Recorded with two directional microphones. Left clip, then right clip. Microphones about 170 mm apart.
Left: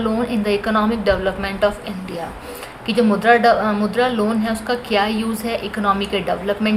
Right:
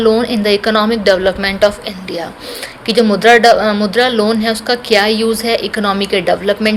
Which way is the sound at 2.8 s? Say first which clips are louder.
Right 6 dB; 35° right (ahead or behind).